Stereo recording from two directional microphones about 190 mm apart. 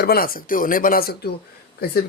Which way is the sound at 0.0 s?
50° left (ahead or behind).